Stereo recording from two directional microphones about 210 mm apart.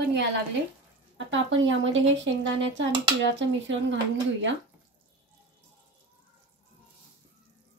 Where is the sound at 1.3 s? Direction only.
65° right (ahead or behind).